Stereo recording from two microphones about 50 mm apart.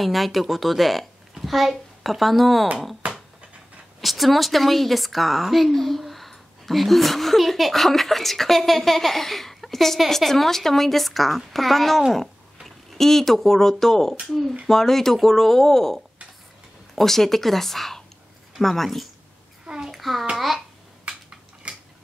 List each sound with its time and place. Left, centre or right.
0.0 s a child's voice: centre
3.0 s a sound: right
4.0 s a woman's voice: centre
19.6 s a sound: centre
19.9 s a woman's voice: centre
21.6 s tick-tock: right